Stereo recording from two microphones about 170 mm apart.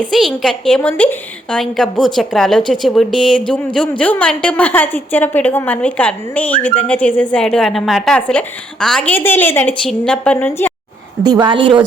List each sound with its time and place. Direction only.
0.0 s a woman's voice: centre (ahead or behind)
11.2 s a woman's voice: 25° right (ahead or behind)